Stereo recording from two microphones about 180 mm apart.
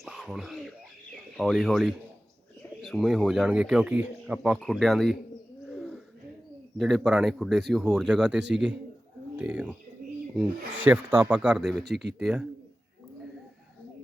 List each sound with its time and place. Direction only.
0.0 s a sound: centre (ahead or behind)
1.4 s speech: centre (ahead or behind)
5.6 s bird: centre (ahead or behind)
6.7 s speech: centre (ahead or behind)
10.8 s speech: 10° right (ahead or behind)
11.8 s speech: 65° right (ahead or behind)
12.2 s speech: 5° right (ahead or behind)